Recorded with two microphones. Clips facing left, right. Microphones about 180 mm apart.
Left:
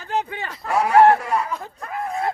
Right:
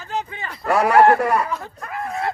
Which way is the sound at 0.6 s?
70° right (ahead or behind).